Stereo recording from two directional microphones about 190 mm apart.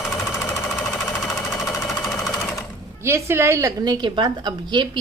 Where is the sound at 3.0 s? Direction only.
15° right (ahead or behind).